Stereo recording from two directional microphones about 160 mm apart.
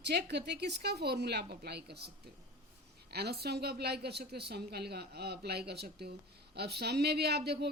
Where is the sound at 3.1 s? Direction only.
90° right.